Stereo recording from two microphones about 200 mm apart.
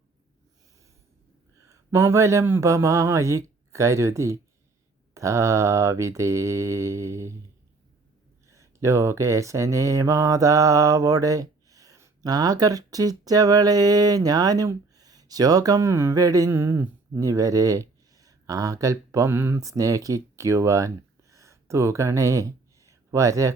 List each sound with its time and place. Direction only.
1.6 s speech: 15° right (ahead or behind)
5.1 s mantra: 15° right (ahead or behind)
8.4 s mantra: 15° right (ahead or behind)